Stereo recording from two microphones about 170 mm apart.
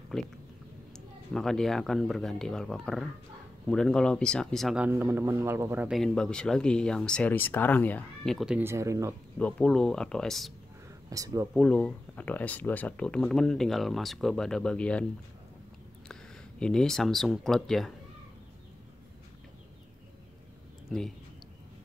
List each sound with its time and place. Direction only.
0.1 s speech: centre (ahead or behind)
4.8 s a man's voice: 15° right (ahead or behind)
5.9 s speech: 5° left (ahead or behind)
8.4 s a man's voice: 5° right (ahead or behind)
9.4 s speech: 5° left (ahead or behind)
11.1 s speech: 20° right (ahead or behind)
11.5 s speech: 5° left (ahead or behind)
16.1 s speech: 5° left (ahead or behind)